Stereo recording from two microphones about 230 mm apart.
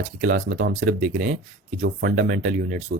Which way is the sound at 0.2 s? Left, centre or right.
Right.